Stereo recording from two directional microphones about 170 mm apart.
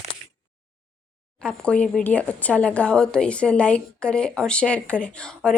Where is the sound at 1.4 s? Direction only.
5° left (ahead or behind).